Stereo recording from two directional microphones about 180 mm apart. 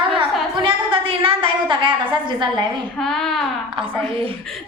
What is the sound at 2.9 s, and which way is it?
Speech, 5° left (ahead or behind).